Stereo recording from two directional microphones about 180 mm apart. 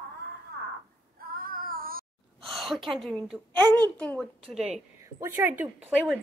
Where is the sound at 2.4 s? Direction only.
Centre (ahead or behind).